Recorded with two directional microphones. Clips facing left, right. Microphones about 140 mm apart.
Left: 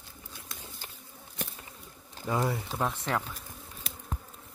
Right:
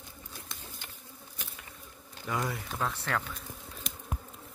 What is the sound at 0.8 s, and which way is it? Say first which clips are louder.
Walk: left 2 dB; 35° left (ahead or behind).